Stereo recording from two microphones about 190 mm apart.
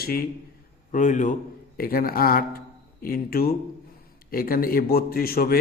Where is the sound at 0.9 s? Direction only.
40° left (ahead or behind).